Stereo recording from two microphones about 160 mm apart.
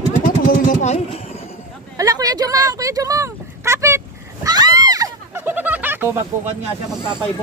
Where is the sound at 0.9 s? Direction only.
40° left (ahead or behind).